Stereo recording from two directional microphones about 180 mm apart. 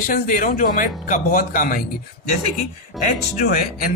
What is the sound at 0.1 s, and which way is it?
Speech, 50° left (ahead or behind).